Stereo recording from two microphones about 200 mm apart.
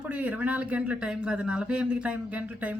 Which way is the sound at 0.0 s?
5° right (ahead or behind).